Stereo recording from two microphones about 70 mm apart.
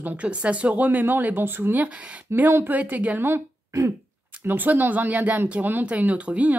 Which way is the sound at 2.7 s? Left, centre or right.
Right.